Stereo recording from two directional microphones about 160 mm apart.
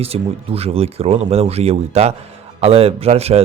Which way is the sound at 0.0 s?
40° right (ahead or behind).